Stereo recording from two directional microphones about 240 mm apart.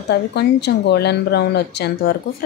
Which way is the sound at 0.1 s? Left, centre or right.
Left.